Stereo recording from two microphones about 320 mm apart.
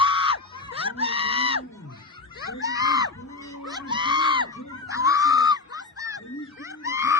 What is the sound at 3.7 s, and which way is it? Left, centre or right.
Screaming, centre.